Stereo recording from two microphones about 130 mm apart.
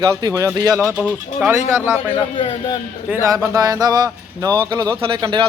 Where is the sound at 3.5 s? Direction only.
30° right (ahead or behind).